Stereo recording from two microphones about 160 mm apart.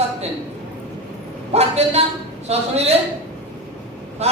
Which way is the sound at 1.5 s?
40° right (ahead or behind).